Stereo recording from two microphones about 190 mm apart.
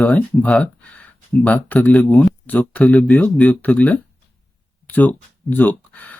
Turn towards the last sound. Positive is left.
turn(degrees=10)  # may be behind; listen again after turning